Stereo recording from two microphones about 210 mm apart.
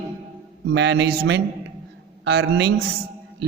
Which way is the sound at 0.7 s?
55° right (ahead or behind).